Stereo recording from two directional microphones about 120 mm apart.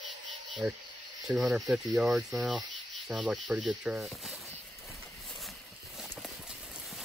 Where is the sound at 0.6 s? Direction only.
10° right (ahead or behind).